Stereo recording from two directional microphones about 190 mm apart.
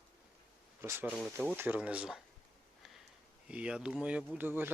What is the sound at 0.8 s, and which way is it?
Speech, 10° right (ahead or behind).